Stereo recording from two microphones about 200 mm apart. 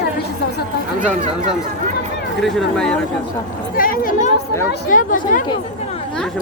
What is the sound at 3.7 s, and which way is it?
Speech, 45° left (ahead or behind).